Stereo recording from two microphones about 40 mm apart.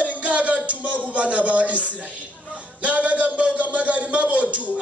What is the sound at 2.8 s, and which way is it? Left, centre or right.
A man's voice, right.